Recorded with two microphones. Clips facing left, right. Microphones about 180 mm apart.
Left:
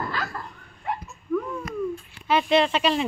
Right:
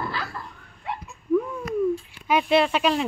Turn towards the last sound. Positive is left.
turn(degrees=-5)  # may be behind; listen again after turning